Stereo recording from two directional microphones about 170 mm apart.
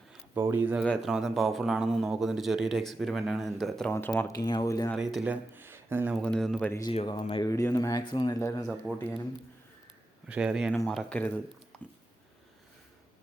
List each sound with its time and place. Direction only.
0.3 s speech: 15° right (ahead or behind)
3.9 s speech: 15° left (ahead or behind)
4.9 s speech: 5° right (ahead or behind)
6.2 s speech: centre (ahead or behind)
6.7 s speech: 20° left (ahead or behind)
6.9 s speech: 35° left (ahead or behind)
7.5 s speech: 15° left (ahead or behind)
10.2 s speech: 5° right (ahead or behind); by 11.3 s 10° left (ahead or behind)